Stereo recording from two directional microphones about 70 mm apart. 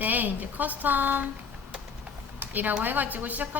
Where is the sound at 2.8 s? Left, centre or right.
Right.